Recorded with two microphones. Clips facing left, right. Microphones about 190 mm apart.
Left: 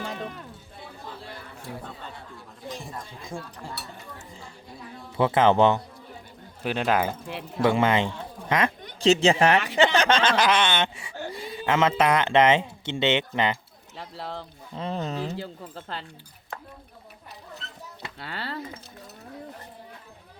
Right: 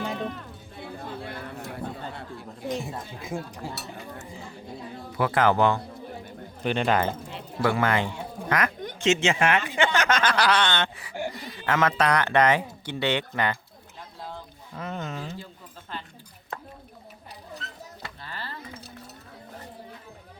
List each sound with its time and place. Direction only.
0.0 s music: centre (ahead or behind)
3.0 s speech: 5° right (ahead or behind)
5.1 s speech: 25° left (ahead or behind)
6.6 s speech: 5° left (ahead or behind)
7.6 s a woman's voice: 25° left (ahead or behind)
13.9 s speech: 75° left (ahead or behind)
14.8 s a woman's voice: 35° left (ahead or behind)
18.2 s speech: 75° left (ahead or behind)